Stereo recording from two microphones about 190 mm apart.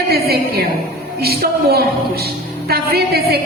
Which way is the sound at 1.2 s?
55° right (ahead or behind).